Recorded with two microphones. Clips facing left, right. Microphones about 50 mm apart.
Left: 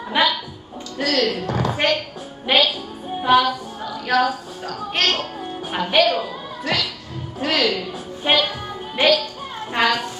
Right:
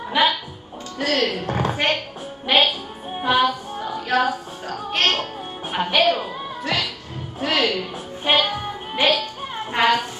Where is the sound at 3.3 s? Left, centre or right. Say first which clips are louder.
Left 3 dB; right.